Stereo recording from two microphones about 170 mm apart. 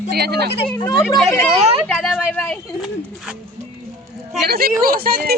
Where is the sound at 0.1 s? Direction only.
70° right (ahead or behind).